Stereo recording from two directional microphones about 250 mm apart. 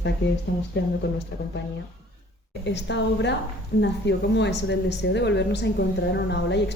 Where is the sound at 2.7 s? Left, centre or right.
Left.